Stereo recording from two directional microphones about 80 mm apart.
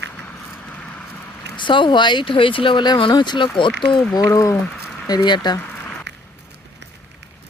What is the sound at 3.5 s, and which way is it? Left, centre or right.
Speech, left.